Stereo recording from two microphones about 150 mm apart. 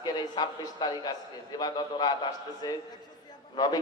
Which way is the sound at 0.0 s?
25° left (ahead or behind).